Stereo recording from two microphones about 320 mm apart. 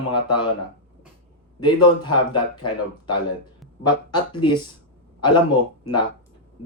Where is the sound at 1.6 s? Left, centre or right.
Centre.